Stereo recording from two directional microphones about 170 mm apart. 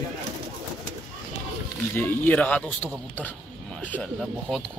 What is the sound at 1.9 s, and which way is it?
Speech, 10° left (ahead or behind).